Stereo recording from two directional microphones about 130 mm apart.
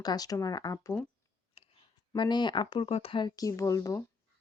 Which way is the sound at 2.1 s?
35° left (ahead or behind).